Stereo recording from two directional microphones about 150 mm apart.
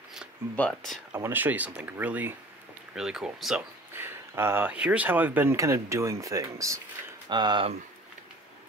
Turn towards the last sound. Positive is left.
turn(degrees=-30)  # may be behind; listen again after turning